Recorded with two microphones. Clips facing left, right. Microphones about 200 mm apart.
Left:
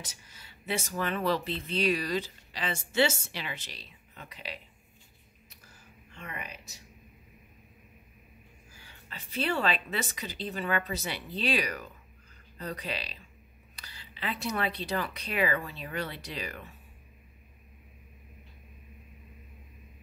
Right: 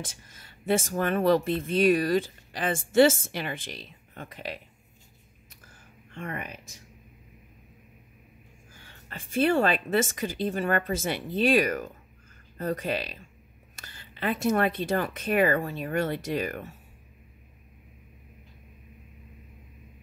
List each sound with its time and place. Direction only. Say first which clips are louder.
0.0 s speech: right 7 dB; 50° right (ahead or behind)
6.1 s speech: right 6 dB; 50° right (ahead or behind)
8.8 s speech: right 5 dB; 50° right (ahead or behind)